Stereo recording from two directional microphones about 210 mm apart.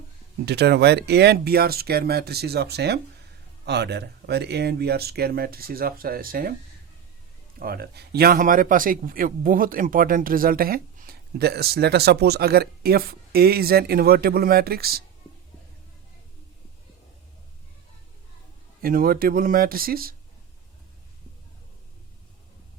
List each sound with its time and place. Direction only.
0.4 s a man's voice: 50° right (ahead or behind)
7.6 s a man's voice: 45° right (ahead or behind)
18.8 s a man's voice: 45° right (ahead or behind)